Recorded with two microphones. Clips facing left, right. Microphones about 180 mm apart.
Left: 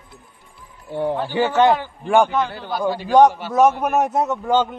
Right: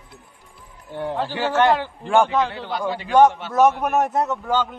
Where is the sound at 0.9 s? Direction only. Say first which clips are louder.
Left 5 dB; 15° left (ahead or behind).